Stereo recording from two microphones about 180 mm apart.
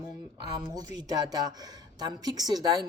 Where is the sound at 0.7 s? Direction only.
20° right (ahead or behind).